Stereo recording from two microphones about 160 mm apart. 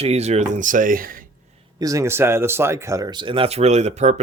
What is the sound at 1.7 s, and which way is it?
Speech, 20° right (ahead or behind).